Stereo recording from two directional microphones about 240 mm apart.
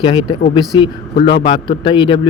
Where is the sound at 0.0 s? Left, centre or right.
Centre.